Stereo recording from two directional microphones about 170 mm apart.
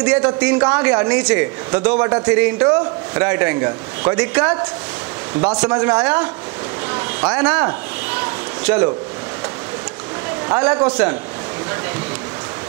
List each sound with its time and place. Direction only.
0.0 s a man's voice: 5° right (ahead or behind)
6.9 s a sound: 10° right (ahead or behind)
10.5 s a man's voice: 5° right (ahead or behind)